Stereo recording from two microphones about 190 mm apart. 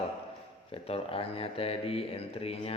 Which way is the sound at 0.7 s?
30° left (ahead or behind).